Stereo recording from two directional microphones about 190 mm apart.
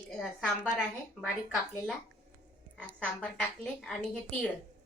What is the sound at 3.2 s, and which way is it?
A woman's voice, 5° left (ahead or behind).